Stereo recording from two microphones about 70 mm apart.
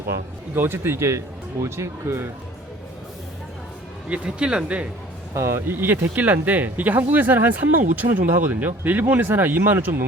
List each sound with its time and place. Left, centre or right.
0.5 s a man's voice: right
4.1 s speech: centre
5.3 s speech: right